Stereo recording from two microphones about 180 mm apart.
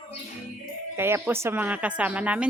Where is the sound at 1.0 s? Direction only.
15° right (ahead or behind).